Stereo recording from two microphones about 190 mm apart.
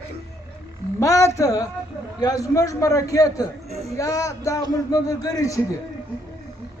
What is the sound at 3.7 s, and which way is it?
Speech, 35° right (ahead or behind).